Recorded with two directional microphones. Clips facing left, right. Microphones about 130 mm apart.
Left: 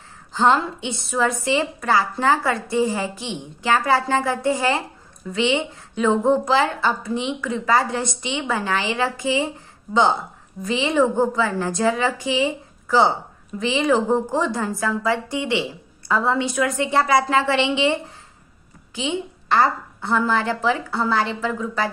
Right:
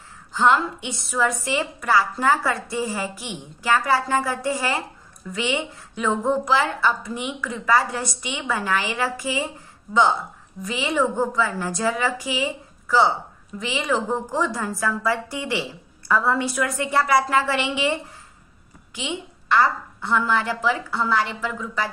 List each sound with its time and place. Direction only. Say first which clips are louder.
0.3 s a woman's voice: left 1 dB; 30° left (ahead or behind)
10.6 s a woman's voice: left 4 dB; 25° left (ahead or behind)
13.6 s a woman's voice: left 5 dB; 30° left (ahead or behind)
18.9 s a woman's voice: left 5 dB; 30° left (ahead or behind)